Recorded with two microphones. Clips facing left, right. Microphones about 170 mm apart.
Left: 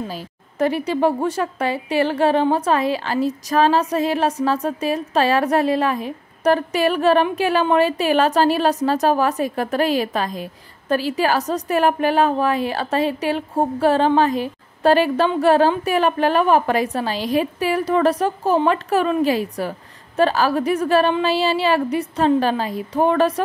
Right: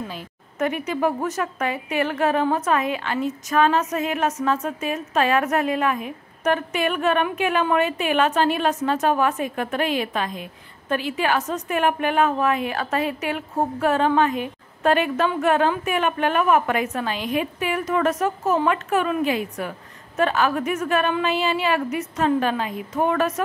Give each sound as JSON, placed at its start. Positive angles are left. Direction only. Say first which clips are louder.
{"t": 0.1, "sound": "a woman's voice", "louder": "left 4 dB", "side_deg": 35}